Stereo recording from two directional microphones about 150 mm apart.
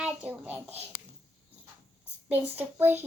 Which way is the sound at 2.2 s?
10° right (ahead or behind).